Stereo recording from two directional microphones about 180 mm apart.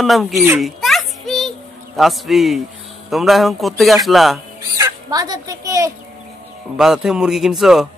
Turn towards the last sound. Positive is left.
turn(degrees=0)  # may be behind; listen again after turning